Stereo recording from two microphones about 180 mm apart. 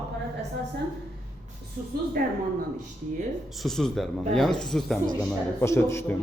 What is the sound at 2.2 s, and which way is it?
Speech, 55° right (ahead or behind).